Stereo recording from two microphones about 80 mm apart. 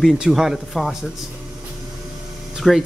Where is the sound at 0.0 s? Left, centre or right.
Centre.